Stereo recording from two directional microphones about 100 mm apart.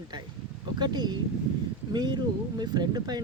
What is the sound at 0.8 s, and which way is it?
Speech, 45° right (ahead or behind).